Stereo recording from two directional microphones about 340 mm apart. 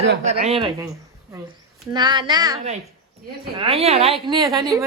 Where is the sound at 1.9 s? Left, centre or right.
Centre.